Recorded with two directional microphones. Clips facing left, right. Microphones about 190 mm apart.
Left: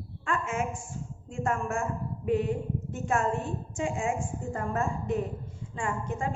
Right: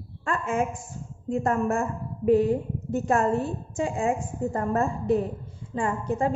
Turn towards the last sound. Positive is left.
turn(degrees=-35)  # may be behind; listen again after turning